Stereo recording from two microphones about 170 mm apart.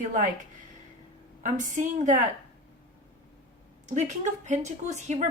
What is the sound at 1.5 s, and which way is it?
Speech, 50° right (ahead or behind).